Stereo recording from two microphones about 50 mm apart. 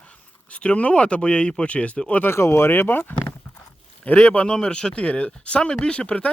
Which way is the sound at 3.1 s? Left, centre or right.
Left.